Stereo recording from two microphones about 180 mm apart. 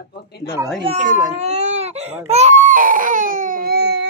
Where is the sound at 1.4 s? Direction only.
35° right (ahead or behind); by 4.1 s 65° right (ahead or behind).